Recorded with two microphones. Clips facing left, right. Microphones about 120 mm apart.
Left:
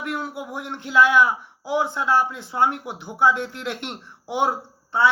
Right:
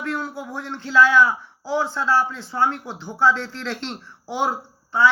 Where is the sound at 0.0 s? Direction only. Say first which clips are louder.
Right 1 dB; 15° left (ahead or behind).